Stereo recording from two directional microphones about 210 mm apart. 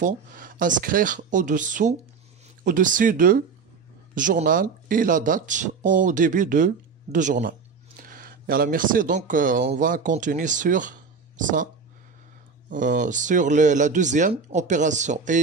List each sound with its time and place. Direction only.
0.0 s speech: 40° right (ahead or behind)
12.6 s speech: 40° right (ahead or behind)